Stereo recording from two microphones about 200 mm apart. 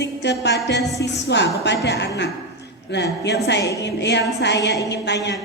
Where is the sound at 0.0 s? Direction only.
60° left (ahead or behind).